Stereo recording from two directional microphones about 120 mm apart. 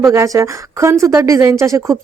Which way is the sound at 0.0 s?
25° right (ahead or behind).